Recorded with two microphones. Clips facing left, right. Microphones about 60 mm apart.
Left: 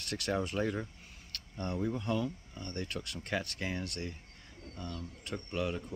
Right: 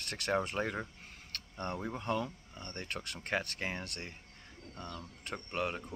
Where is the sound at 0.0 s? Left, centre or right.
Right.